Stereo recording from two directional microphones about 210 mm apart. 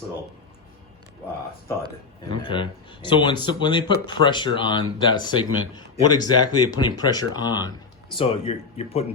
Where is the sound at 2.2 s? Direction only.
25° left (ahead or behind).